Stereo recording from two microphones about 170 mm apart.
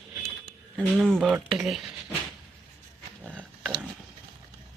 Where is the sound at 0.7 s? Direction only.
5° left (ahead or behind).